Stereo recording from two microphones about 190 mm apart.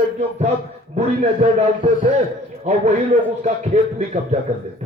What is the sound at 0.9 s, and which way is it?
Speech, 35° right (ahead or behind).